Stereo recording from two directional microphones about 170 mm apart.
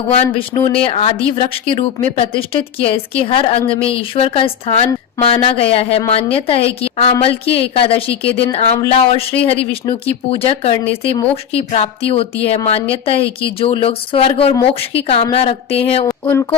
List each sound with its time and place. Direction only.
0.3 s speech: 30° left (ahead or behind)